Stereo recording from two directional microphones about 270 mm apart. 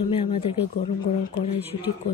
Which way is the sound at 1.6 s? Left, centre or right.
Centre.